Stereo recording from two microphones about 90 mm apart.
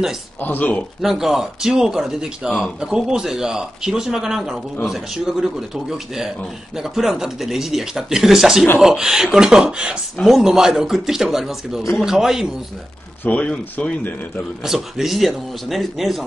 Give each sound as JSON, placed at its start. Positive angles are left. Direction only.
{"t": 0.4, "sound": "speech", "side_deg": 20}
{"t": 1.0, "sound": "speech", "side_deg": -5}
{"t": 13.2, "sound": "speech", "side_deg": 15}
{"t": 14.6, "sound": "speech", "side_deg": -5}